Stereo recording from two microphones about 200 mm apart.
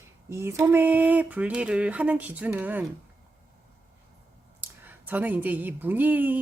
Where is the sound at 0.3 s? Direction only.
15° right (ahead or behind).